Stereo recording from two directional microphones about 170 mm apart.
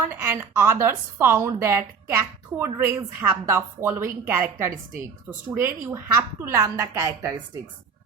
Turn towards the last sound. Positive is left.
turn(degrees=-15)  # may be behind; listen again after turning